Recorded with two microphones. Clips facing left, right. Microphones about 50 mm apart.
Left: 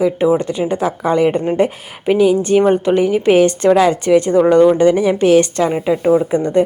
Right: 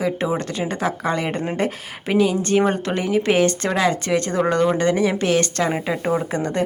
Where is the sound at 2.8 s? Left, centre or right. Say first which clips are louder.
Left 7 dB; centre.